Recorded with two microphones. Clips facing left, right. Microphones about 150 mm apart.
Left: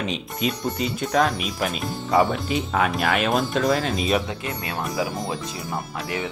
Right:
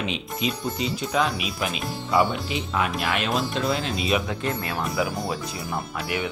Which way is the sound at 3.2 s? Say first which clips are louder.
Left 4 dB; 50° left (ahead or behind).